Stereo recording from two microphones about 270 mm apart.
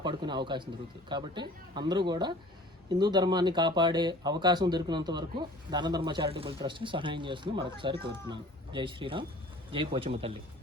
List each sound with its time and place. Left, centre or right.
0.0 s speech: centre